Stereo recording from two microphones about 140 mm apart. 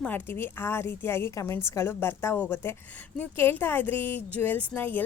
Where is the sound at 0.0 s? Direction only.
15° left (ahead or behind).